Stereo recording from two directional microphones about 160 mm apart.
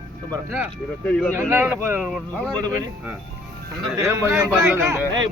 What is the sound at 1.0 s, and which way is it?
Speech, 5° left (ahead or behind).